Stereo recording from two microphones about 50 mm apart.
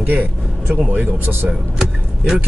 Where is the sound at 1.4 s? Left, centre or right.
Centre.